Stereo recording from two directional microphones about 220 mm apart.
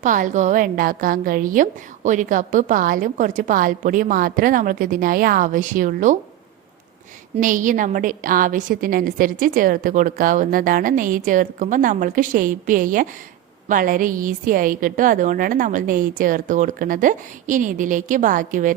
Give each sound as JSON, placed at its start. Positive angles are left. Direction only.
{"t": 0.0, "sound": "a woman's voice", "side_deg": -35}
{"t": 7.3, "sound": "a woman's voice", "side_deg": -35}